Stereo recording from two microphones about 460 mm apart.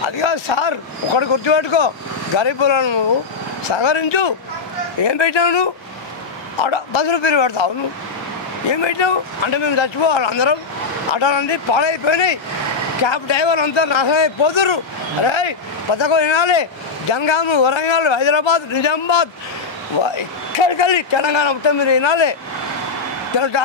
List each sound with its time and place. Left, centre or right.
0.2 s a man's voice: left
5.0 s a man's voice: left
8.7 s a man's voice: left
20.5 s a man's voice: left